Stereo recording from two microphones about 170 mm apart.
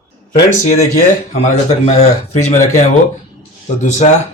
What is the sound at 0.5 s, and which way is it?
Speech, 45° left (ahead or behind).